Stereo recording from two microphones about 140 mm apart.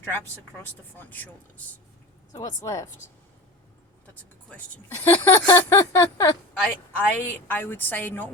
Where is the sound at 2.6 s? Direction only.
20° left (ahead or behind).